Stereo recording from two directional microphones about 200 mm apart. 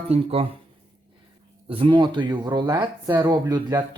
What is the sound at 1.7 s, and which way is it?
Speech, 25° right (ahead or behind).